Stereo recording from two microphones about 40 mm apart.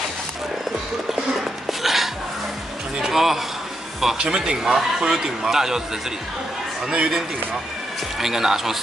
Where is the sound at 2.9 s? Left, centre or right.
Centre.